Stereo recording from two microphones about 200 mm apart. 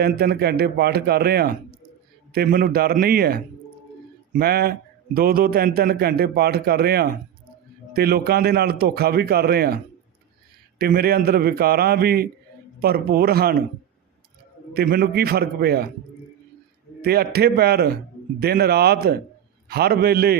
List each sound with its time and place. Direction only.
0.0 s a man's voice: 50° right (ahead or behind)
14.7 s a man's voice: 50° right (ahead or behind)
17.0 s a man's voice: 50° right (ahead or behind)